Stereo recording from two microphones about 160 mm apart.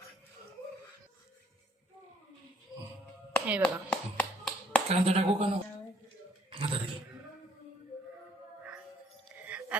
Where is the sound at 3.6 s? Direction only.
10° left (ahead or behind).